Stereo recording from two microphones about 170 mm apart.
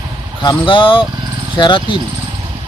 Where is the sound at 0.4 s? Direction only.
30° left (ahead or behind).